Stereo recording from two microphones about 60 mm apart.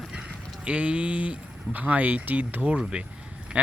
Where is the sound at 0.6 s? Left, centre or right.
Right.